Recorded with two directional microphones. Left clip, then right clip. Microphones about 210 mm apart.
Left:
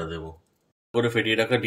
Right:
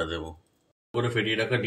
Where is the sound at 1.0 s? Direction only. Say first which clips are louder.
Left 3 dB; 60° left (ahead or behind).